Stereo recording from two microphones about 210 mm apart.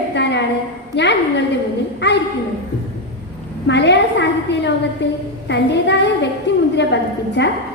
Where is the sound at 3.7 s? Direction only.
55° left (ahead or behind).